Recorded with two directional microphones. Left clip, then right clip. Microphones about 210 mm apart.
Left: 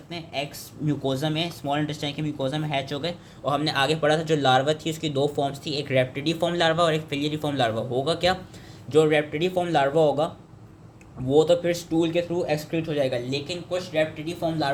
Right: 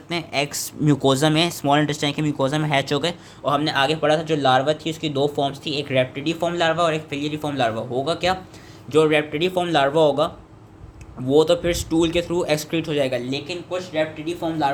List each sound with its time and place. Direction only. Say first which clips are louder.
0.1 s speech: right 8 dB; 35° right (ahead or behind)
3.4 s speech: right 4 dB; 5° right (ahead or behind)